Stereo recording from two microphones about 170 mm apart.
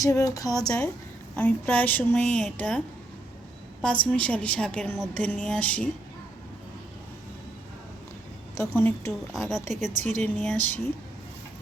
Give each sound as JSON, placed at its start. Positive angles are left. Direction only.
{"t": 0.0, "sound": "speech", "side_deg": 20}
{"t": 1.4, "sound": "a woman's voice", "side_deg": 10}
{"t": 8.5, "sound": "a woman's voice", "side_deg": 15}
{"t": 9.3, "sound": "a woman's voice", "side_deg": 0}
{"t": 9.6, "sound": "a woman's voice", "side_deg": -45}
{"t": 10.2, "sound": "a woman's voice", "side_deg": 5}